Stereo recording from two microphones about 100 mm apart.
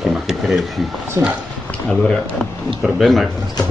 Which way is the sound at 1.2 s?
30° right (ahead or behind).